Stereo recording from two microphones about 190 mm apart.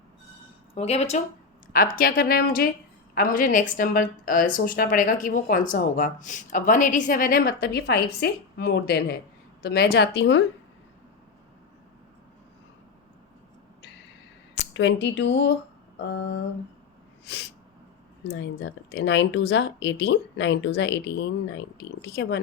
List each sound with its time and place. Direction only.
0.7 s speech: 35° left (ahead or behind)
1.6 s speech: 50° left (ahead or behind); by 10.4 s 65° left (ahead or behind)
14.5 s speech: 70° left (ahead or behind)
17.2 s a sound: 60° left (ahead or behind)
18.2 s speech: 65° left (ahead or behind)